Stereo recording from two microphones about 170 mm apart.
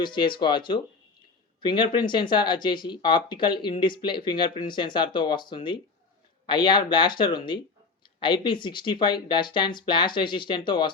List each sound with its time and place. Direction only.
0.0 s speech: 30° left (ahead or behind)